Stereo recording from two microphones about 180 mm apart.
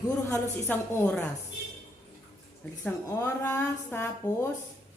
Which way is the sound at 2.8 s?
10° left (ahead or behind).